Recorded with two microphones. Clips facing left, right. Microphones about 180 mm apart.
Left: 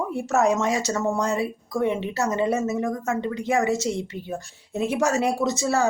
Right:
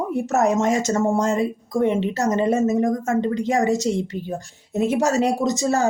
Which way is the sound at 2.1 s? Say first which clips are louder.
Right 3 dB; 45° right (ahead or behind).